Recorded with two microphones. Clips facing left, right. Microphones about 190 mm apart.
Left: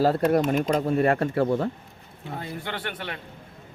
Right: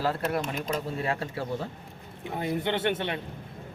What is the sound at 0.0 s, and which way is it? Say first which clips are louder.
Speech: left 8 dB; 40° left (ahead or behind).